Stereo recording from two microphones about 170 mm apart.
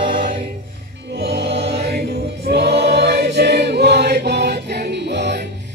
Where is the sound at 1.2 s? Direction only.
90° right.